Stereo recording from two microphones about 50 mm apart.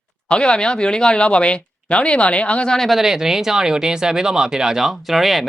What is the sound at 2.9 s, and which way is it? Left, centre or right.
Speech, centre.